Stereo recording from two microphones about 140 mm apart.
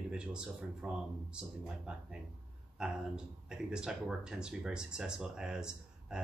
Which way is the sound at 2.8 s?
5° right (ahead or behind).